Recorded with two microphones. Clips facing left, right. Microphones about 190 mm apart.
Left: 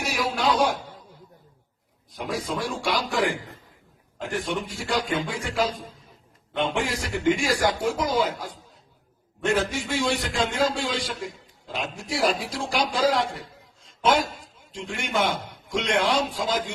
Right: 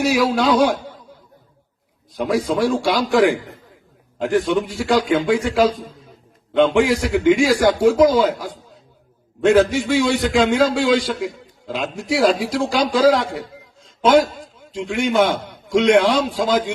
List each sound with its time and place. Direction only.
0.0 s a man's voice: 90° right
2.1 s a man's voice: 90° right